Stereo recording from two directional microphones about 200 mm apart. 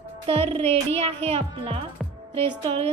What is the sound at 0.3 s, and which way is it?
A child's voice, 30° right (ahead or behind).